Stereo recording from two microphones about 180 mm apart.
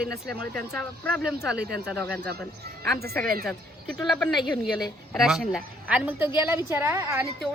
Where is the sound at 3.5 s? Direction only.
Centre (ahead or behind); by 7.2 s 15° right (ahead or behind).